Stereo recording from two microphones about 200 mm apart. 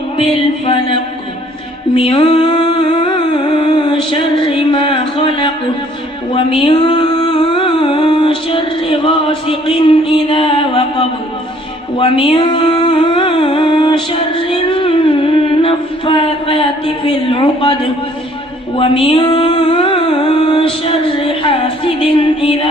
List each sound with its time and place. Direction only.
0.2 s speech: 25° left (ahead or behind)
2.0 s a sound: 30° left (ahead or behind)
6.7 s music: 25° left (ahead or behind)
9.5 s a sound: 25° left (ahead or behind)
11.9 s music: 25° left (ahead or behind)
18.8 s music: 25° left (ahead or behind)